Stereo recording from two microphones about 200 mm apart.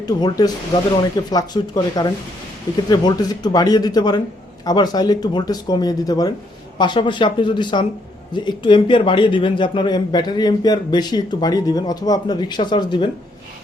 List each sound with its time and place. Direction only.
0.0 s speech: 20° left (ahead or behind)